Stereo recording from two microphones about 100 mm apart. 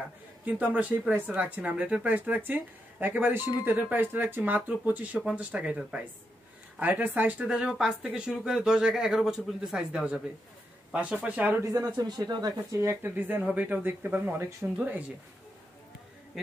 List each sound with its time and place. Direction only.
0.5 s speech: 15° right (ahead or behind)
11.6 s speech: 35° right (ahead or behind)
13.0 s speech: 20° right (ahead or behind)